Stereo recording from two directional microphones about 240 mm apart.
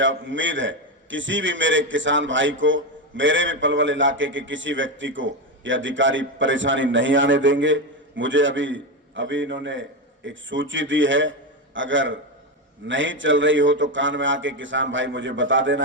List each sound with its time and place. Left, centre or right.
0.0 s a man's voice: right